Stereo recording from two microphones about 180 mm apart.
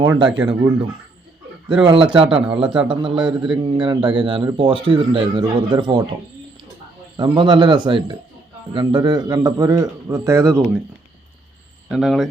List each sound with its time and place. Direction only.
0.0 s speech: 20° right (ahead or behind)
7.2 s speech: 25° right (ahead or behind)
11.9 s speech: centre (ahead or behind)